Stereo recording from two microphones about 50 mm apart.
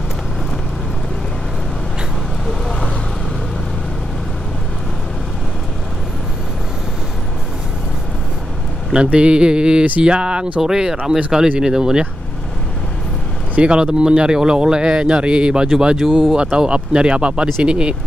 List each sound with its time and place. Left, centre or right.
2.4 s vehicle: centre
8.9 s a man's voice: right
13.6 s a man's voice: centre
16.3 s speech: centre